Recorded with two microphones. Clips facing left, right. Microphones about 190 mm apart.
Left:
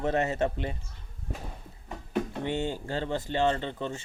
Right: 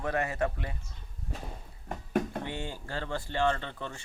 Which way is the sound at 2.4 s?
20° left (ahead or behind).